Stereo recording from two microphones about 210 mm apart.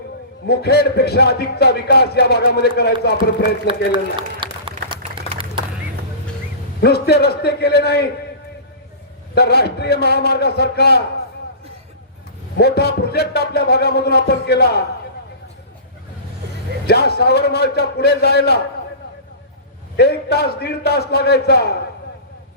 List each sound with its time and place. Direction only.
0.4 s a man's voice: 50° left (ahead or behind)
3.7 s a sound: 25° right (ahead or behind)
6.8 s a man's voice: 50° left (ahead or behind)
9.3 s a man's voice: 50° left (ahead or behind)
12.5 s a man's voice: 50° left (ahead or behind)
16.8 s a man's voice: 50° left (ahead or behind)
20.0 s a man's voice: 50° left (ahead or behind)